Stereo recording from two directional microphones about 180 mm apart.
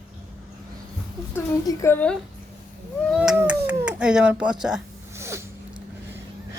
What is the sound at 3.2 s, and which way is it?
Cat, 10° right (ahead or behind).